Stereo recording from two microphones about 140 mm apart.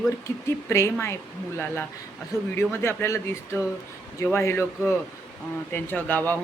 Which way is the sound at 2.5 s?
20° left (ahead or behind).